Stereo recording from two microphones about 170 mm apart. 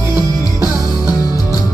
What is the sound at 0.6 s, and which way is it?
Music, 20° left (ahead or behind).